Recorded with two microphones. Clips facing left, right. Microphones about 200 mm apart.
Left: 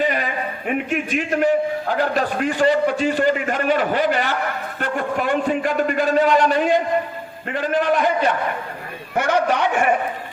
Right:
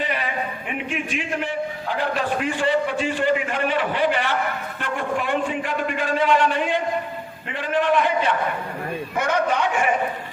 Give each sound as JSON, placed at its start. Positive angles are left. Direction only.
{"t": 0.0, "sound": "a sound", "side_deg": 45}
{"t": 0.7, "sound": "a man's voice", "side_deg": 45}
{"t": 9.1, "sound": "a man's voice", "side_deg": 75}